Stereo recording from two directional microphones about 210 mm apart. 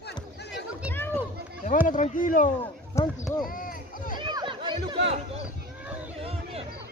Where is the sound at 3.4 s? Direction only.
40° left (ahead or behind).